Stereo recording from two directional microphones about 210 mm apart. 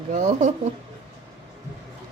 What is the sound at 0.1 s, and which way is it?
Speech, 35° right (ahead or behind).